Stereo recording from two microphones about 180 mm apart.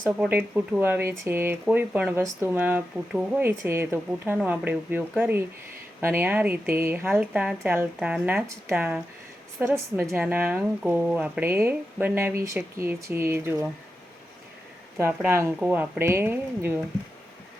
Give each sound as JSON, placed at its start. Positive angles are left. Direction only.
{"t": 0.2, "sound": "speech", "side_deg": -10}
{"t": 14.9, "sound": "speech", "side_deg": -15}